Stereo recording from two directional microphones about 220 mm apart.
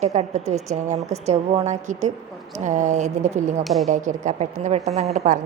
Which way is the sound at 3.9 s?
35° right (ahead or behind).